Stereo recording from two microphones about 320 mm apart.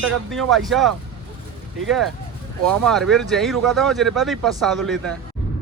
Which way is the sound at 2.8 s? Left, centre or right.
Centre.